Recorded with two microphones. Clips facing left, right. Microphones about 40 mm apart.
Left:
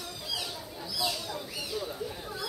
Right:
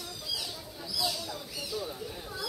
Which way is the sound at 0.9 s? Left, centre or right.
Left.